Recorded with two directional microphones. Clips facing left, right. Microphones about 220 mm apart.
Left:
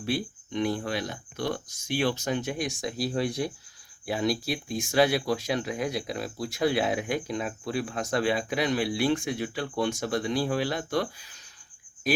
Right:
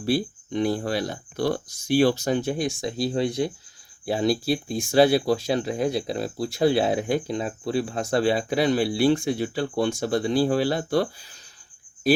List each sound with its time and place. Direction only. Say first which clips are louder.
0.0 s speech: right 6 dB; 35° right (ahead or behind)